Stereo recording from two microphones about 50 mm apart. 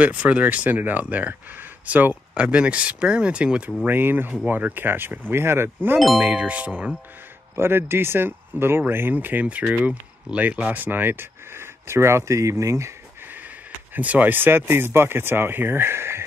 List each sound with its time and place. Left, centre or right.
0.0 s speech: right
2.3 s speech: right
3.8 s speech: right
6.1 s speech: right
7.5 s speech: right
9.1 s speech: right
13.9 s speech: right